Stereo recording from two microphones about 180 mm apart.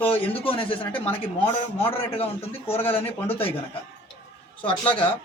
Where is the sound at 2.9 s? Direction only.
10° left (ahead or behind).